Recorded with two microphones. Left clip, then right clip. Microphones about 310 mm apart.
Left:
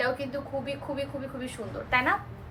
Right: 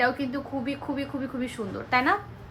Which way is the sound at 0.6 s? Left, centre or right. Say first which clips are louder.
Right 1 dB; right.